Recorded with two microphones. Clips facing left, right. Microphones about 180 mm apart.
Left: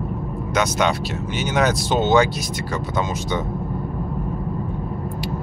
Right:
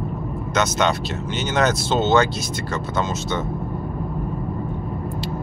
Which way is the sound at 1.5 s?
10° left (ahead or behind).